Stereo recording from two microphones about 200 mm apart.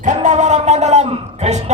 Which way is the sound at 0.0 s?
35° right (ahead or behind).